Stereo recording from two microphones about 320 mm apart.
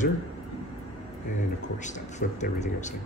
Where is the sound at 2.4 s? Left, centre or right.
Left.